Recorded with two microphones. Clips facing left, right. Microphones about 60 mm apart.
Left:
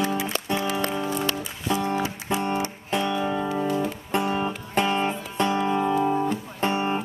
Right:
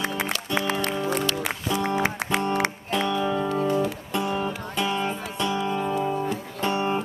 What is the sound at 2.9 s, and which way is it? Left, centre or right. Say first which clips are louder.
Music: even; centre.